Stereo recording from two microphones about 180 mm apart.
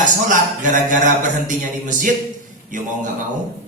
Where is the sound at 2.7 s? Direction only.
45° right (ahead or behind).